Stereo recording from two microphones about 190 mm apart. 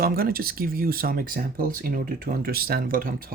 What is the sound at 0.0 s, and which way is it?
Speech, 50° right (ahead or behind).